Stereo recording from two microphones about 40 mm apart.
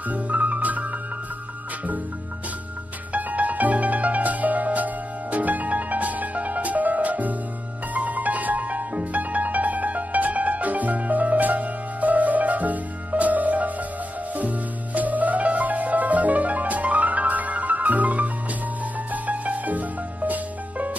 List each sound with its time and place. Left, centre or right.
0.1 s music: right
3.1 s music: right
15.0 s music: right